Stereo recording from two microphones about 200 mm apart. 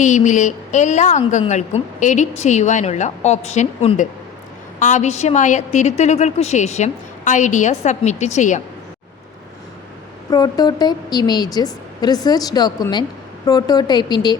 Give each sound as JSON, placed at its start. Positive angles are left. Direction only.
{"t": 0.0, "sound": "a woman's voice", "side_deg": 40}
{"t": 10.2, "sound": "a woman's voice", "side_deg": 20}